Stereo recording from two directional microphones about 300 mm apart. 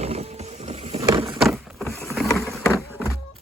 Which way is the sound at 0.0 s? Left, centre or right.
Right.